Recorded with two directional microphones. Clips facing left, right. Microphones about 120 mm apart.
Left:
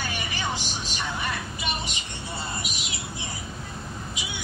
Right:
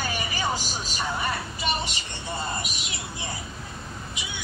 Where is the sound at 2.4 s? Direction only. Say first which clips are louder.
Right 2 dB; 45° right (ahead or behind).